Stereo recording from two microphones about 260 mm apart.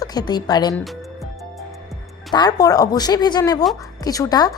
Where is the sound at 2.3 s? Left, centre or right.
Centre.